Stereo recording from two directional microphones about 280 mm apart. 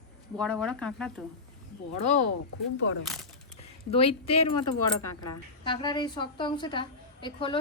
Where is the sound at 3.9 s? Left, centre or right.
Centre.